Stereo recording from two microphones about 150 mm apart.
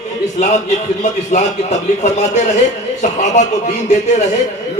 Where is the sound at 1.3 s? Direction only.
50° left (ahead or behind).